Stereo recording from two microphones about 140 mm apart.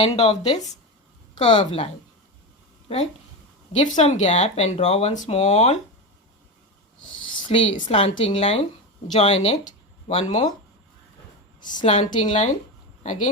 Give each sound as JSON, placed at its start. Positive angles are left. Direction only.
{"t": 0.0, "sound": "speech", "side_deg": 45}
{"t": 0.4, "sound": "speech", "side_deg": 30}
{"t": 1.4, "sound": "speech", "side_deg": 45}
{"t": 3.8, "sound": "speech", "side_deg": 55}
{"t": 5.1, "sound": "speech", "side_deg": 60}
{"t": 7.4, "sound": "a woman's voice", "side_deg": 40}
{"t": 11.9, "sound": "a woman's voice", "side_deg": 40}
{"t": 13.0, "sound": "speech", "side_deg": 60}